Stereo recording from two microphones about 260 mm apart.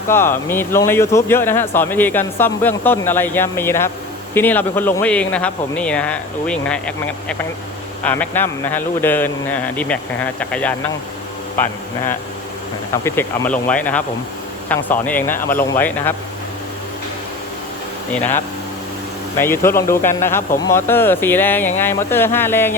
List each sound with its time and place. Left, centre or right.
0.1 s a man's voice: centre
12.9 s a man's voice: centre
18.1 s speech: centre
19.4 s speech: centre